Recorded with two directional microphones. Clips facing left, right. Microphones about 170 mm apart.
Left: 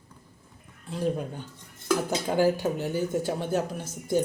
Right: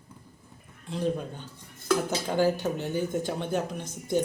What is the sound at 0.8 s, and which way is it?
Speech, 10° left (ahead or behind).